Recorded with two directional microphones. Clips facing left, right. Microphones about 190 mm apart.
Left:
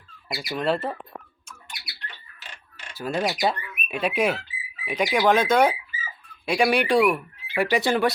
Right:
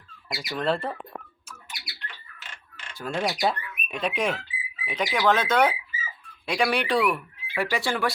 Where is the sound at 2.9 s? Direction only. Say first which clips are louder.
Left 2 dB; 5° left (ahead or behind).